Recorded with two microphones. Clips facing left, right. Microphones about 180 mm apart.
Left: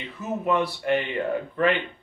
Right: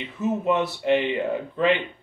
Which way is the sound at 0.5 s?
20° right (ahead or behind).